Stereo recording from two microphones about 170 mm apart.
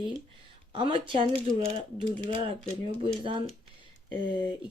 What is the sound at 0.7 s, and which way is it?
Speech, 30° right (ahead or behind).